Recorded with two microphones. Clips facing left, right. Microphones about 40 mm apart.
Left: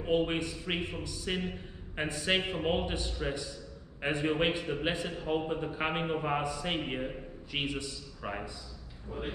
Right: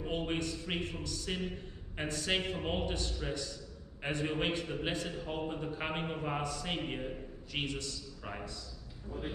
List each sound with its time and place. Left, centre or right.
0.0 s a man's voice: centre